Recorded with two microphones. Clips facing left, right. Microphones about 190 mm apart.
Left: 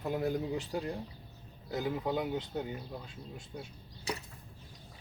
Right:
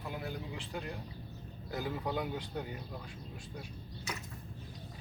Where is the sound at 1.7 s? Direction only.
20° left (ahead or behind).